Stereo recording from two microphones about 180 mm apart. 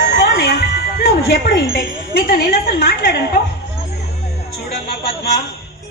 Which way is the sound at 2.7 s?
55° left (ahead or behind).